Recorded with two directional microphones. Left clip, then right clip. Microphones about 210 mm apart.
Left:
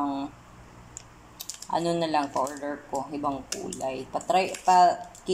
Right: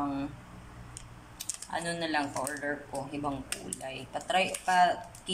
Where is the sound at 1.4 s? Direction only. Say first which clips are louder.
Left 7 dB; 20° left (ahead or behind).